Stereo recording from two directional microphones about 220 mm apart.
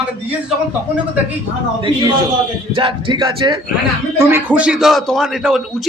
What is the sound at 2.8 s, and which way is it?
A man's voice, 20° right (ahead or behind).